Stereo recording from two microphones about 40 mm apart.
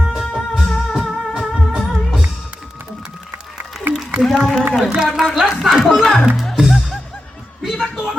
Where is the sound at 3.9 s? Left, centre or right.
Right.